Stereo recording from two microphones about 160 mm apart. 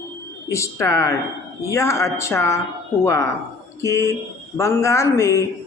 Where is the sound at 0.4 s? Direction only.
20° left (ahead or behind).